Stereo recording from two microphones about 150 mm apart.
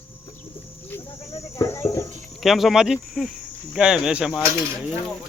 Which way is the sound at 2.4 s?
Centre (ahead or behind).